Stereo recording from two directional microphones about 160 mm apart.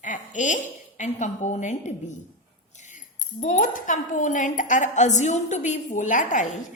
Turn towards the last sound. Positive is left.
turn(degrees=50)  # may be behind; listen again after turning